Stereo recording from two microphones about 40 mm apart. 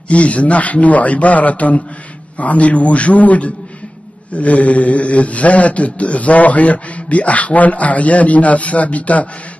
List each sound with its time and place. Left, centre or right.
0.1 s a man's voice: left